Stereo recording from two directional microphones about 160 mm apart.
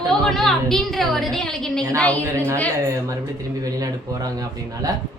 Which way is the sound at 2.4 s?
20° right (ahead or behind).